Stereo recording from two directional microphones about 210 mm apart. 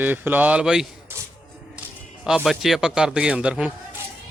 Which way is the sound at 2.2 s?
Centre (ahead or behind).